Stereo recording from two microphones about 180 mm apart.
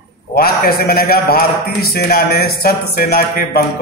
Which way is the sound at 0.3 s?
55° left (ahead or behind).